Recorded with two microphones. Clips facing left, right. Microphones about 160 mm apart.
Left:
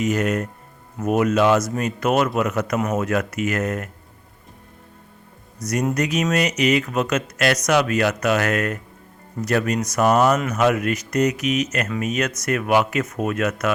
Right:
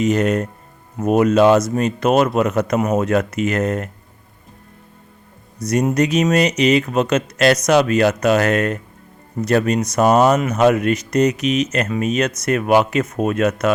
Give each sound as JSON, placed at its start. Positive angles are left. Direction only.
{"t": 0.0, "sound": "speech", "side_deg": -30}
{"t": 5.5, "sound": "speech", "side_deg": -30}